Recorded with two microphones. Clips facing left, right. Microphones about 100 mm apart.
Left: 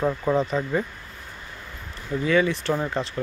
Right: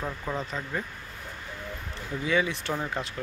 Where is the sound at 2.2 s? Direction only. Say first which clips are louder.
Left 6 dB; 10° right (ahead or behind).